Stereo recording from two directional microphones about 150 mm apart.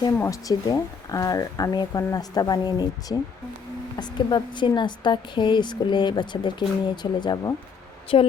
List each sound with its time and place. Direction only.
0.2 s speech: 25° left (ahead or behind)
8.1 s a woman's voice: 40° left (ahead or behind)